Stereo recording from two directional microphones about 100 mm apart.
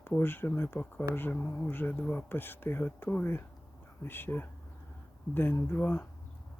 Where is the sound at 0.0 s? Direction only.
20° left (ahead or behind).